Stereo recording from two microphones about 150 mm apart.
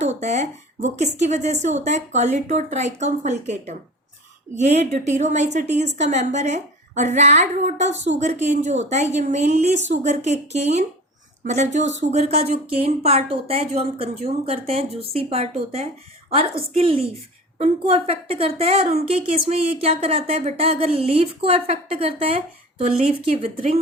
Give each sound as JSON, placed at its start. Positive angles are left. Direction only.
{"t": 0.0, "sound": "a woman's voice", "side_deg": -50}